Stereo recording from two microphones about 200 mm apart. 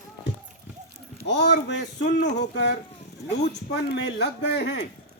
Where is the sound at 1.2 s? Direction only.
60° left (ahead or behind).